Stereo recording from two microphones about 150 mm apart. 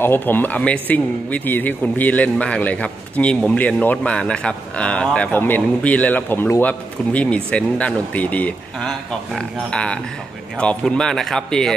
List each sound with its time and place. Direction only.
0.0 s speech: 15° left (ahead or behind)